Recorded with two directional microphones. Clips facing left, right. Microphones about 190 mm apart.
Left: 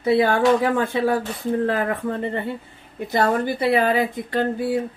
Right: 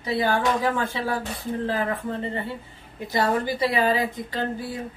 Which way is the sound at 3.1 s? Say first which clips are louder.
Left 3 dB; 55° left (ahead or behind).